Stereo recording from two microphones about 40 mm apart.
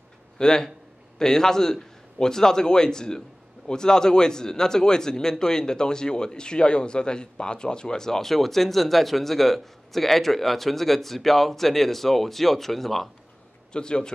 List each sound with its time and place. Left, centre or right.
0.4 s a man's voice: centre
13.7 s speech: left